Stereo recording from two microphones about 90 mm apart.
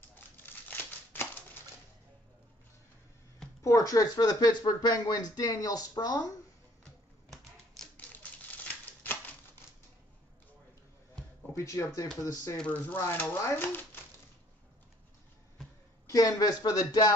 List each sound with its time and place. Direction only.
0.1 s crumpling: 20° left (ahead or behind)
3.6 s speech: 40° left (ahead or behind)
7.2 s typewriter: 5° left (ahead or behind)
8.1 s typewriter: 20° left (ahead or behind)
11.5 s speech: 35° left (ahead or behind)
12.5 s speech: 10° left (ahead or behind)
12.9 s speech: 25° left (ahead or behind)
16.1 s speech: 40° left (ahead or behind)